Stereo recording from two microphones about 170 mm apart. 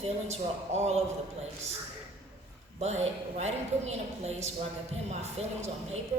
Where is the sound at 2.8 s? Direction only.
40° right (ahead or behind).